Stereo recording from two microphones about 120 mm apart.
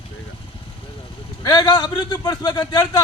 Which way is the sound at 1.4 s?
35° left (ahead or behind).